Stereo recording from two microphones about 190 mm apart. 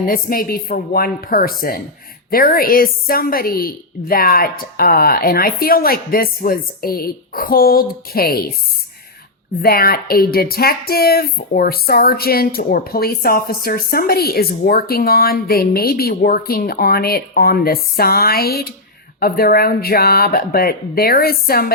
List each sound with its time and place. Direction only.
0.0 s speech: 50° left (ahead or behind)
9.6 s speech: 50° left (ahead or behind)